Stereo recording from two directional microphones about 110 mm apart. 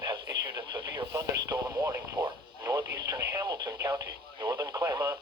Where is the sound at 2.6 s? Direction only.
35° right (ahead or behind).